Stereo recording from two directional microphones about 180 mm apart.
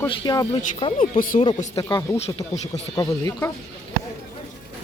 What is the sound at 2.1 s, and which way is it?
Speech, 35° left (ahead or behind).